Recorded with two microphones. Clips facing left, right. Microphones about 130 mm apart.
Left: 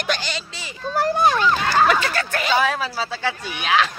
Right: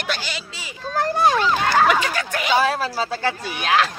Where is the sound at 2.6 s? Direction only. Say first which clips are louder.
Right 1 dB; 40° right (ahead or behind).